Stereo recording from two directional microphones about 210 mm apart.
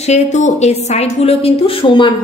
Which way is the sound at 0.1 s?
35° left (ahead or behind).